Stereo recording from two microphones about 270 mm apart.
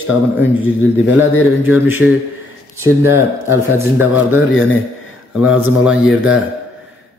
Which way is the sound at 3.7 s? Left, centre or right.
Centre.